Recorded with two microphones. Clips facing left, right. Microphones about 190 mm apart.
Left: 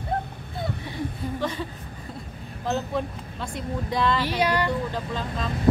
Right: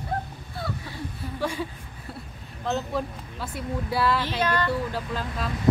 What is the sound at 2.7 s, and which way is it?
Speech, 5° right (ahead or behind).